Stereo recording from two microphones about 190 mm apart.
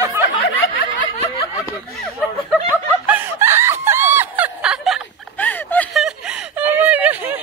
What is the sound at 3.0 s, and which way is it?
Snicker, 10° right (ahead or behind).